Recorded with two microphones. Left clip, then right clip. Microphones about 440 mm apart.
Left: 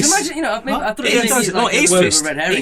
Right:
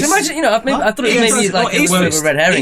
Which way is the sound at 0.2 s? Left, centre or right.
Right.